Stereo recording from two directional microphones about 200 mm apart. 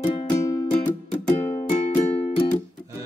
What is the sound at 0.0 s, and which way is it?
Music, 25° left (ahead or behind).